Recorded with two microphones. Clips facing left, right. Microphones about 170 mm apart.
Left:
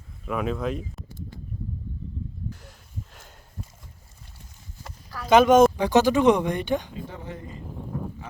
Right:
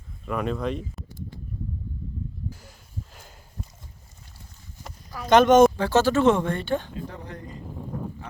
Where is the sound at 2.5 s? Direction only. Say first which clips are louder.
Left 1 dB; centre (ahead or behind).